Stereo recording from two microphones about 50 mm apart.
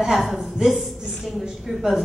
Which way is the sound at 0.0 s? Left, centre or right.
Centre.